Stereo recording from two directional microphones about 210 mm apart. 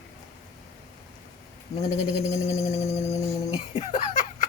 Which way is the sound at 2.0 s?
30° left (ahead or behind).